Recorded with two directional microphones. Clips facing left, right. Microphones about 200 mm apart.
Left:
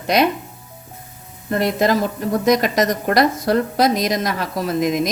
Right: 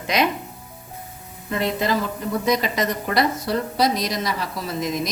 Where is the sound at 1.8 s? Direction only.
45° left (ahead or behind).